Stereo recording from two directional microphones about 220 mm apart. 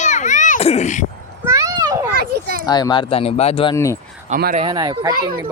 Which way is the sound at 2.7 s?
20° left (ahead or behind).